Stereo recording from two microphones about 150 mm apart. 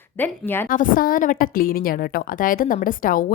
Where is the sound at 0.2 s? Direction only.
15° left (ahead or behind).